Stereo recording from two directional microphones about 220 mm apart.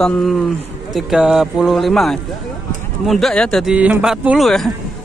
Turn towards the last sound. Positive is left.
turn(degrees=0)  # may be behind; listen again after turning